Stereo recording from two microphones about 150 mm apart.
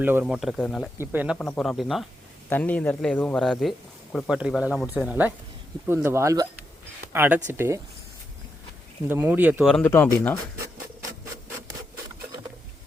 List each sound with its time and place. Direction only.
0.0 s speech: 15° right (ahead or behind)
0.3 s speech: centre (ahead or behind)
0.9 s speech: 10° right (ahead or behind)
1.4 s speech: 5° left (ahead or behind)
2.5 s speech: 10° left (ahead or behind); by 7.8 s 15° right (ahead or behind)
9.0 s speech: 10° right (ahead or behind)
9.8 s speech: 10° left (ahead or behind)